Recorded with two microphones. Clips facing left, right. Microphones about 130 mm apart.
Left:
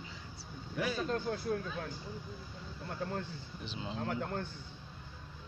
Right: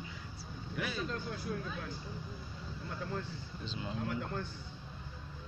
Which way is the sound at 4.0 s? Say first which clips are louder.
Left 2 dB; 45° left (ahead or behind).